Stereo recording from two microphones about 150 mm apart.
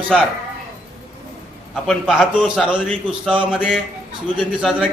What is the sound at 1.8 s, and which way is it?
A man's voice, 5° right (ahead or behind).